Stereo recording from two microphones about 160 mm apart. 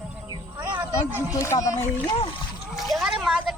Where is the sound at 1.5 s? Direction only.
30° left (ahead or behind).